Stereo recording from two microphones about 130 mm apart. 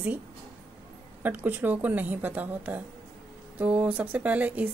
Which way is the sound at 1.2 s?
15° right (ahead or behind).